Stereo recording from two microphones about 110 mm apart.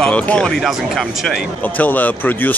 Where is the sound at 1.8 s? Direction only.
15° left (ahead or behind).